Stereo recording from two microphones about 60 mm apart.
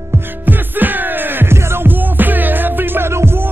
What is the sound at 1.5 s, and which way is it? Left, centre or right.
Music, right.